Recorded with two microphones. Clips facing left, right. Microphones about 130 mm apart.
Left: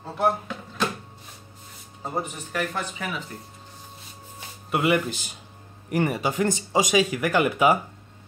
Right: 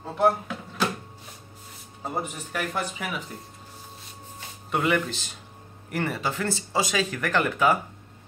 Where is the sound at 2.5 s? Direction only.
10° right (ahead or behind).